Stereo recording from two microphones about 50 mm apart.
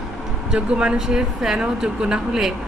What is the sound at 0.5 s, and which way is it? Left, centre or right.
Speech, centre.